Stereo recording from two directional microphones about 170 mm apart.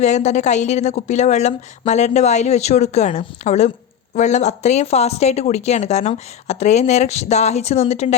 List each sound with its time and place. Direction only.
0.0 s speech: 40° left (ahead or behind)